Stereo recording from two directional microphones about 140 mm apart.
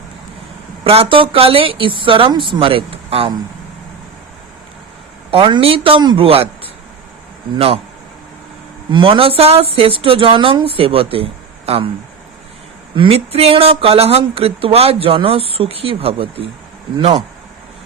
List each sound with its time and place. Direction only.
0.9 s speech: 40° right (ahead or behind)
5.3 s speech: 40° right (ahead or behind)
8.9 s speech: 40° right (ahead or behind)
13.0 s speech: 45° right (ahead or behind)